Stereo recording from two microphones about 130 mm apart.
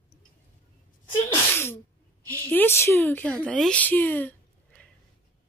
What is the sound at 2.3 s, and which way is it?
A woman's voice, 15° left (ahead or behind).